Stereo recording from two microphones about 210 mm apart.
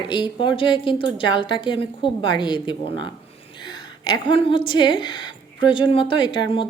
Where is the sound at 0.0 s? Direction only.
20° left (ahead or behind).